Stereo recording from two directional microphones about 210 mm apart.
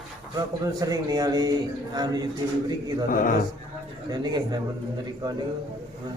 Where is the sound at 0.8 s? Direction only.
20° right (ahead or behind).